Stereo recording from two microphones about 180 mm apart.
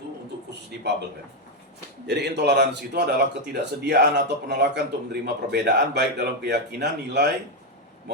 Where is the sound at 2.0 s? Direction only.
70° right (ahead or behind).